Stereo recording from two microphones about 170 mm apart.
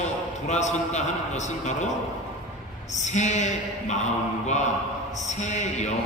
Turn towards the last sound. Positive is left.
turn(degrees=40)  # may be behind; listen again after turning